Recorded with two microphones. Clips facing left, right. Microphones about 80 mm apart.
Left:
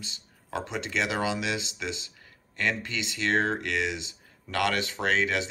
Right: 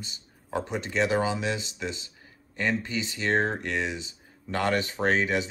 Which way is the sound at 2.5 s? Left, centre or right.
Centre.